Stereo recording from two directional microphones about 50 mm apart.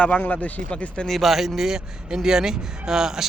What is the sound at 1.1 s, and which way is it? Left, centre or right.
A man's voice, centre.